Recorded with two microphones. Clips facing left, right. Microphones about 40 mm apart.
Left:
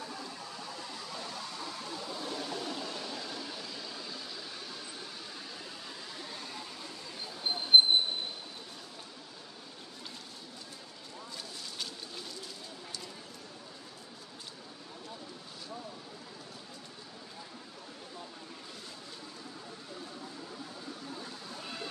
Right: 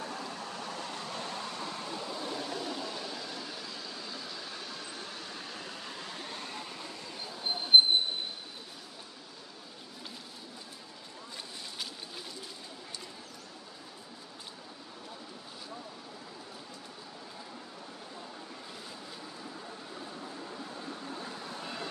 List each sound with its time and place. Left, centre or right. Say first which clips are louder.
0.0 s vehicle: right 3 dB; right
2.0 s a sound: even; centre
7.2 s train: even; centre